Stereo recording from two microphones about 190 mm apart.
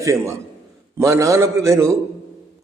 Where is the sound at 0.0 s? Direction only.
15° right (ahead or behind).